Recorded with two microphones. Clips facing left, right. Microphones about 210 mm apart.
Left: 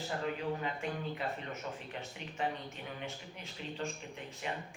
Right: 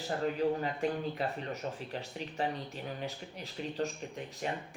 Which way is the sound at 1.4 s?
35° right (ahead or behind).